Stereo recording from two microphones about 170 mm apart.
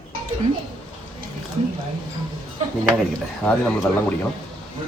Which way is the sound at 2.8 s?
5° left (ahead or behind).